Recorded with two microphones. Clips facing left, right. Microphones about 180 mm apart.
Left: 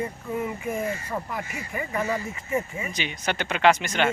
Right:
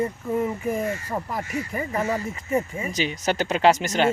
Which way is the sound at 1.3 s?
40° right (ahead or behind).